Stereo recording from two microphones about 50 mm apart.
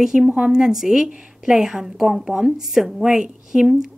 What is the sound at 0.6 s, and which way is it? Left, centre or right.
Speech, centre.